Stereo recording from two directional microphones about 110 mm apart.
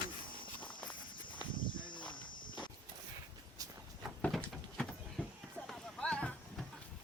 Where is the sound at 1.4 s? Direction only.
45° left (ahead or behind).